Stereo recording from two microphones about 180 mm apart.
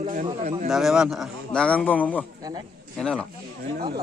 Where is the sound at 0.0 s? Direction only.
45° right (ahead or behind).